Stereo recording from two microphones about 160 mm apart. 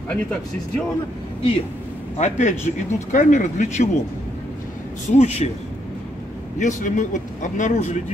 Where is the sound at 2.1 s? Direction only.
50° left (ahead or behind).